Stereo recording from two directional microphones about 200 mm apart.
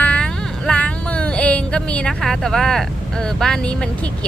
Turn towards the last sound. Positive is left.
turn(degrees=5)  # may be behind; listen again after turning